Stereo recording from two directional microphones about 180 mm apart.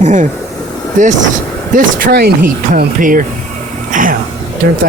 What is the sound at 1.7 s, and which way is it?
Speech, 55° right (ahead or behind).